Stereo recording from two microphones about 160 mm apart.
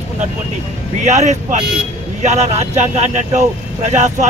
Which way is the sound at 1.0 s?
45° right (ahead or behind).